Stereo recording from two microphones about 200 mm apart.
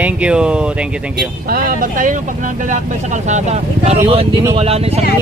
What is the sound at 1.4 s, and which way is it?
Speech, 45° right (ahead or behind).